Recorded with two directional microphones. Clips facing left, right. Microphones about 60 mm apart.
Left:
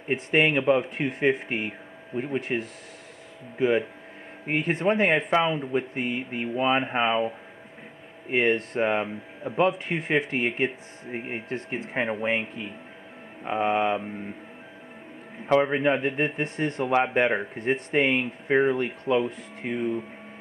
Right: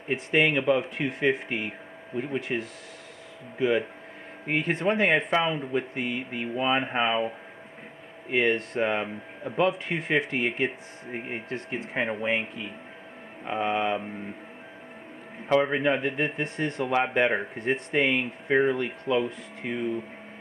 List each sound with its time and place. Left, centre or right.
0.1 s speech: left
6.0 s speech: left
6.5 s speech: centre
8.3 s speech: left
13.5 s speech: left
15.4 s speech: centre
16.8 s speech: centre